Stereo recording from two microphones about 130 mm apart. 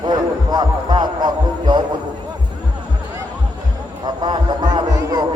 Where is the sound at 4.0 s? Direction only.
35° right (ahead or behind).